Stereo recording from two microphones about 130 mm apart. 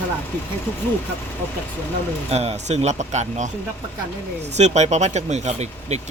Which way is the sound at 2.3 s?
55° right (ahead or behind).